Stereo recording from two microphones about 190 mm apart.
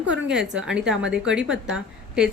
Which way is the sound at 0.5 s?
5° right (ahead or behind).